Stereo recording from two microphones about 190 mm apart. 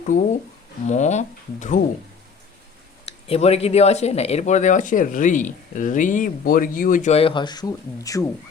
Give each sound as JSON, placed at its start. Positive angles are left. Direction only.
{"t": 0.9, "sound": "speech", "side_deg": 40}
{"t": 3.1, "sound": "speech", "side_deg": 35}